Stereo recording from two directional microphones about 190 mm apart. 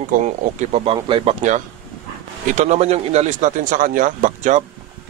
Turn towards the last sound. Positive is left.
turn(degrees=-40)  # may be behind; listen again after turning